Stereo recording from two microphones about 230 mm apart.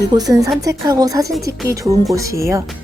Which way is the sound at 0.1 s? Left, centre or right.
Centre.